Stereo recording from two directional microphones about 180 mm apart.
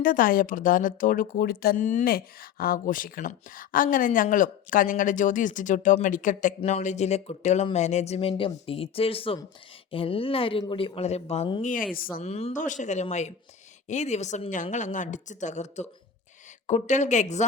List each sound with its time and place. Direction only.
0.0 s a woman's voice: 50° left (ahead or behind); by 11.6 s 30° left (ahead or behind)
11.6 s a woman's voice: 45° left (ahead or behind)
12.2 s speech: 35° left (ahead or behind)